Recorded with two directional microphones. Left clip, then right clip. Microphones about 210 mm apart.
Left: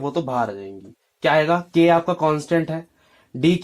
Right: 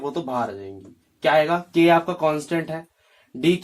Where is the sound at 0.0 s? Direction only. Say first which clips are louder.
Left 3 dB; 35° left (ahead or behind).